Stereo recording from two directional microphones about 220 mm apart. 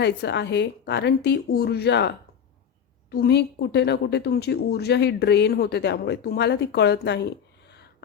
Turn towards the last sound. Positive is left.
turn(degrees=50)  # may be behind; listen again after turning